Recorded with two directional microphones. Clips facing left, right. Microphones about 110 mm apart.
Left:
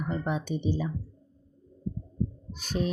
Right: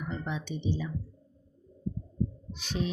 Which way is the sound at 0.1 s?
45° left (ahead or behind).